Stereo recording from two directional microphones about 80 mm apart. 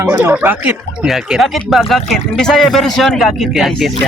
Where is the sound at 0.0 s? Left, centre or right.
Right.